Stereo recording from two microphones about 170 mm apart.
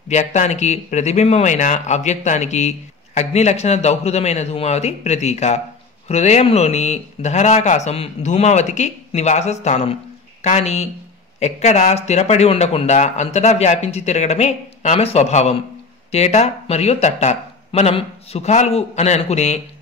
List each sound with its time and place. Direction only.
0.1 s a man's voice: 45° left (ahead or behind)